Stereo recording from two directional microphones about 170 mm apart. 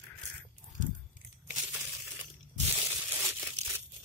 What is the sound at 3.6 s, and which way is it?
Crumpling, 40° right (ahead or behind).